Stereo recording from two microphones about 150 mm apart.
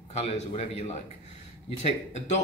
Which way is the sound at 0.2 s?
45° left (ahead or behind).